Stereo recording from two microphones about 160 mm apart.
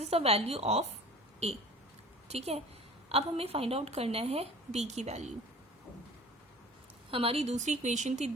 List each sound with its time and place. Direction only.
0.0 s a woman's voice: 40° right (ahead or behind)
7.1 s speech: 35° right (ahead or behind)